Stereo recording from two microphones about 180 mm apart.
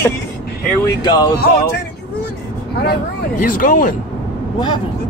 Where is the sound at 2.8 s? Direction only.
55° left (ahead or behind).